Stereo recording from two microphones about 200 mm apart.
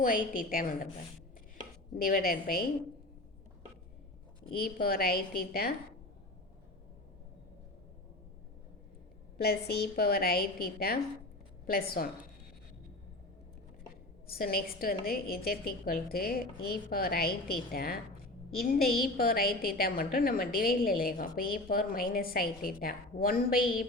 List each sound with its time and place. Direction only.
0.0 s a woman's voice: 45° left (ahead or behind)
2.0 s a woman's voice: 45° left (ahead or behind)
4.5 s a woman's voice: 50° left (ahead or behind)
9.4 s a woman's voice: 50° left (ahead or behind)
14.3 s a woman's voice: 50° left (ahead or behind)